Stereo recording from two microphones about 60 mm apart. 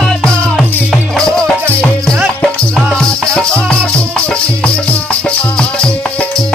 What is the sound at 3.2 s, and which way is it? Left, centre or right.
Music, centre.